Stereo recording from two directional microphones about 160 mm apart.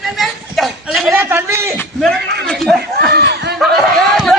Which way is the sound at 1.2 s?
15° right (ahead or behind).